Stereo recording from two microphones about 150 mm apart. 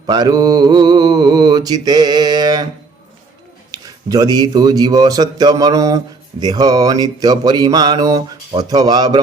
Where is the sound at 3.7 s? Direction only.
25° right (ahead or behind).